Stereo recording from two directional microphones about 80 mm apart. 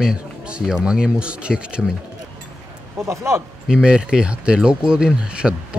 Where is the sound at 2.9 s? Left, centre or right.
Right.